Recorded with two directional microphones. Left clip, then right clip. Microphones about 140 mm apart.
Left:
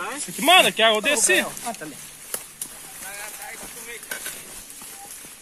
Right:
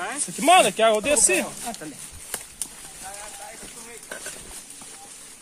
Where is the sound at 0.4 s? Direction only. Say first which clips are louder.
Left 1 dB; 60° right (ahead or behind).